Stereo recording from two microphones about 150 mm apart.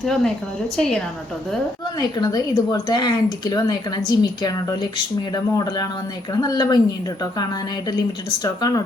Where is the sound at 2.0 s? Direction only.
25° left (ahead or behind).